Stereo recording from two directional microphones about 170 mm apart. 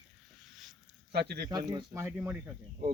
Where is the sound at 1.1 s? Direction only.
70° right (ahead or behind).